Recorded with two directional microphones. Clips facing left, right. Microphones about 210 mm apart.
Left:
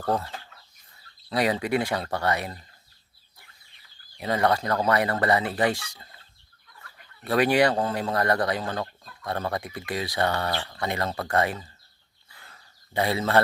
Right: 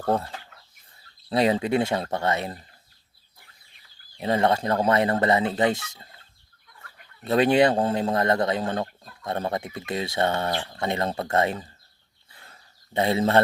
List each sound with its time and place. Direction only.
0.0 s speech: 25° right (ahead or behind)
1.3 s speech: 25° right (ahead or behind)
4.2 s speech: 25° right (ahead or behind)
7.3 s speech: 25° right (ahead or behind)
12.3 s a sound: 25° right (ahead or behind)